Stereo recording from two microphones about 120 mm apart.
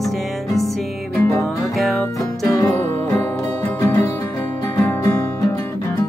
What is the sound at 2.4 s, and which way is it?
Music, 25° left (ahead or behind).